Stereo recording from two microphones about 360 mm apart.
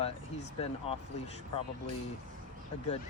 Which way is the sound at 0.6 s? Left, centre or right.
Centre.